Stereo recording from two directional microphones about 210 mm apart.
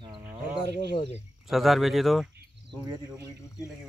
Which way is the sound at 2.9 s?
15° right (ahead or behind).